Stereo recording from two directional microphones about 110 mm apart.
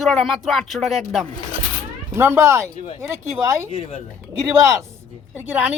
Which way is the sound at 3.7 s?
60° left (ahead or behind).